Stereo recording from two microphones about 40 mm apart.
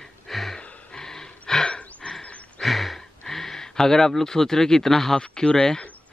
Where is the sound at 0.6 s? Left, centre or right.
Centre.